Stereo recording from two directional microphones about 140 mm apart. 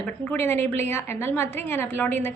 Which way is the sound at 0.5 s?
50° right (ahead or behind).